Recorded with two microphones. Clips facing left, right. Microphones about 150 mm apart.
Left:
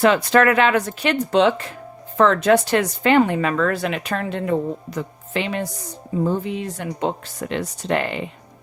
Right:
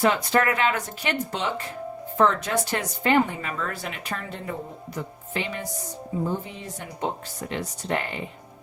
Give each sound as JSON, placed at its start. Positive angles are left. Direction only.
{"t": 0.0, "sound": "speech", "side_deg": 90}